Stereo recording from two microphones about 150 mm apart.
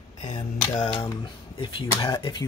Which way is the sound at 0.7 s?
35° left (ahead or behind).